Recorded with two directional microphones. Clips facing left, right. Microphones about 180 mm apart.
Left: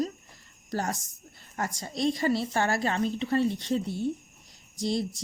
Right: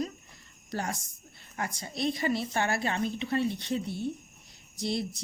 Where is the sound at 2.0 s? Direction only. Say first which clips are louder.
Left 3 dB; 40° left (ahead or behind).